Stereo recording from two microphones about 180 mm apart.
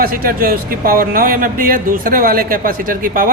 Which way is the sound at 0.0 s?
55° right (ahead or behind).